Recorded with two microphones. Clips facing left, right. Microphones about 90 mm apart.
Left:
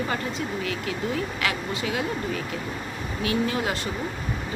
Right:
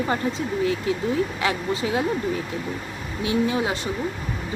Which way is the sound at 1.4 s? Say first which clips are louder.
Right 4 dB; 30° right (ahead or behind).